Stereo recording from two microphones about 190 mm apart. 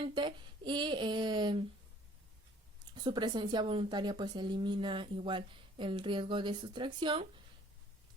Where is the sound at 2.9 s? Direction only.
25° right (ahead or behind).